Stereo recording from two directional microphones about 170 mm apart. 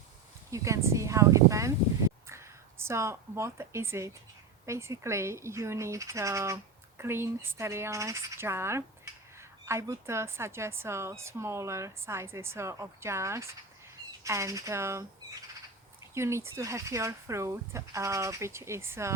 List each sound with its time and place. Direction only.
0.5 s a woman's voice: 20° right (ahead or behind)
16.1 s a woman's voice: 15° right (ahead or behind)